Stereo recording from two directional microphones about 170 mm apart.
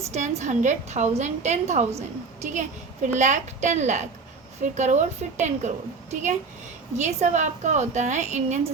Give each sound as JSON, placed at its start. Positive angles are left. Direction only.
{"t": 0.1, "sound": "a woman's voice", "side_deg": -40}